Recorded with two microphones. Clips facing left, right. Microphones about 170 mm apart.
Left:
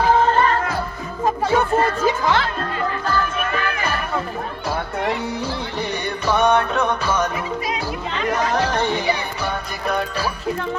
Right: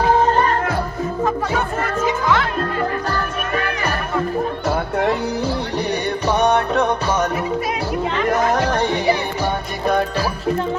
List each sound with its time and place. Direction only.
1.2 s music: 30° left (ahead or behind)
6.3 s music: 40° right (ahead or behind)
9.4 s music: 30° right (ahead or behind)